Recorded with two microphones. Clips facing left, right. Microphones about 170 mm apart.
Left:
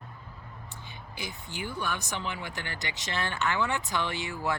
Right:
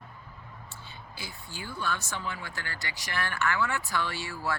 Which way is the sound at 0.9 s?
20° left (ahead or behind).